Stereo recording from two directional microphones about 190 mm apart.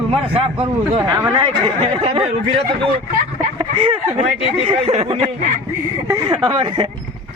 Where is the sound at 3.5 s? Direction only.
25° right (ahead or behind).